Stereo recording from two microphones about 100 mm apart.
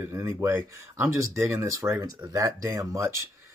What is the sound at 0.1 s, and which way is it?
Speech, 25° right (ahead or behind).